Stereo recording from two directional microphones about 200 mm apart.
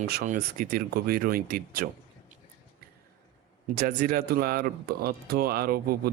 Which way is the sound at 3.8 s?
45° right (ahead or behind).